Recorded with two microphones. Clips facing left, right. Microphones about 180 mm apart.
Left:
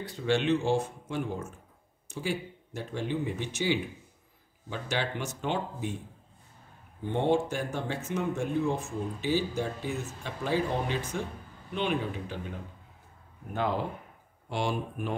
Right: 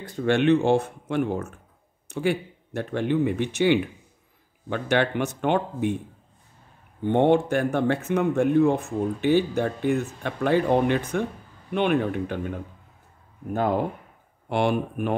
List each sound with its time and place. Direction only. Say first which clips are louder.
0.0 s speech: right 6 dB; 55° right (ahead or behind)
7.1 s speech: right 7 dB; 60° right (ahead or behind)
13.5 s speech: right 6 dB; 45° right (ahead or behind)
14.5 s speech: right 8 dB; 60° right (ahead or behind)